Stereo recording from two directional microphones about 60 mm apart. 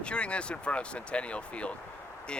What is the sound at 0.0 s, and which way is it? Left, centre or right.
Speech, centre.